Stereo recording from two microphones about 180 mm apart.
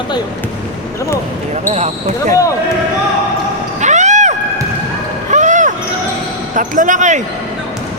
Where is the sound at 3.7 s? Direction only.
40° right (ahead or behind).